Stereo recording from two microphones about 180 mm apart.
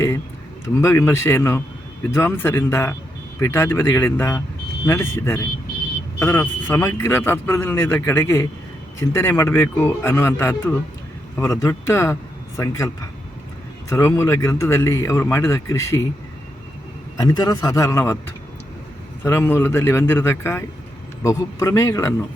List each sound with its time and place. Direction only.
0.6 s speech: 15° left (ahead or behind)
13.9 s speech: 15° left (ahead or behind)
17.2 s a man's voice: 20° left (ahead or behind)